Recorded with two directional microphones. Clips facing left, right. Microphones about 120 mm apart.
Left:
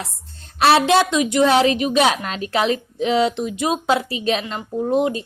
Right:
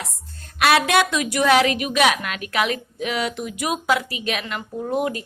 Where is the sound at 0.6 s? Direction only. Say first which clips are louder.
Left 3 dB; 30° left (ahead or behind).